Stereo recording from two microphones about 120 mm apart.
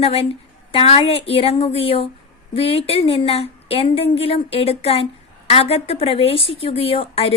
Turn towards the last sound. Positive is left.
turn(degrees=50)  # may be behind; listen again after turning